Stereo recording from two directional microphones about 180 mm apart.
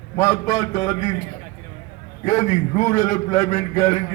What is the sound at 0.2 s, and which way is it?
Speech, 20° left (ahead or behind).